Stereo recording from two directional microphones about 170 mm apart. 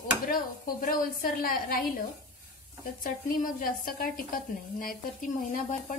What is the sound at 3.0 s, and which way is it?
Speech, 55° left (ahead or behind).